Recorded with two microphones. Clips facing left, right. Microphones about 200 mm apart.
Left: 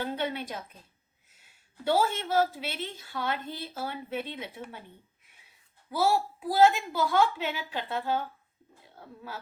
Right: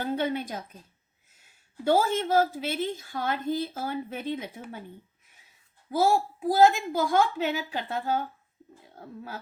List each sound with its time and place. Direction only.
0.0 s a woman's voice: 45° right (ahead or behind)
1.8 s a woman's voice: 45° right (ahead or behind)
5.9 s a woman's voice: 45° right (ahead or behind)